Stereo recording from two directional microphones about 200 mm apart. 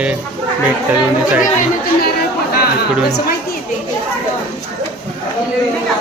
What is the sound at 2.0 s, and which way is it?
Chatter, 50° left (ahead or behind).